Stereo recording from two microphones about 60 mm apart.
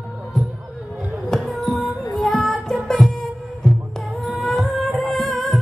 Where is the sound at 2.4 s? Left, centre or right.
Left.